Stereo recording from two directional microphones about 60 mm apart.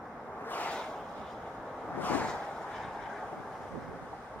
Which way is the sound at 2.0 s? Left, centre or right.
Left.